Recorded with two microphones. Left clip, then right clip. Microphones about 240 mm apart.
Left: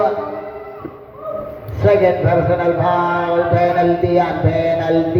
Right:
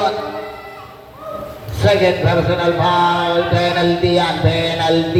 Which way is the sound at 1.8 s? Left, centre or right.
Right.